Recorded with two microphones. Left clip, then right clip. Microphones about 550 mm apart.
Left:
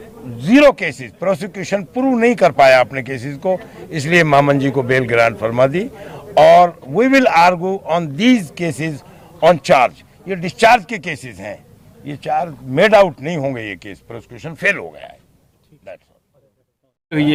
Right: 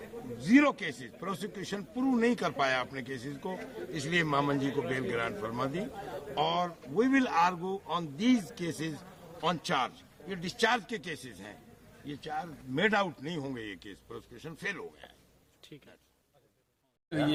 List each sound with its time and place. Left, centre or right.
0.7 s speech: left
17.1 s speech: left